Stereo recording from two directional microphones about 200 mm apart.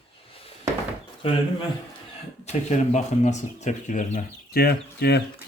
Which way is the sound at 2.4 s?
35° left (ahead or behind).